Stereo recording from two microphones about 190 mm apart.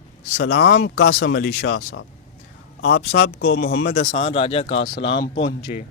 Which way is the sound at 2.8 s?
60° left (ahead or behind).